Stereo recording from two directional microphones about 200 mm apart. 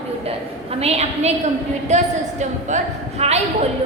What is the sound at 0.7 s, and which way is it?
A woman's voice, 30° right (ahead or behind).